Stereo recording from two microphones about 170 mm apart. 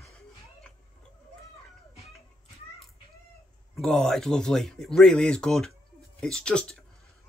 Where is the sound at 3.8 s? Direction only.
5° left (ahead or behind).